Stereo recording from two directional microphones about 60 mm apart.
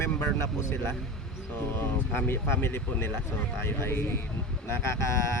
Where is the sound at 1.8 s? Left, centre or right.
Left.